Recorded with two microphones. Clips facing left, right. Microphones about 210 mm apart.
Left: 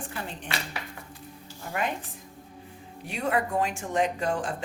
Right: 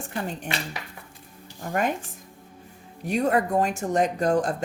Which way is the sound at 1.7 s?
45° right (ahead or behind).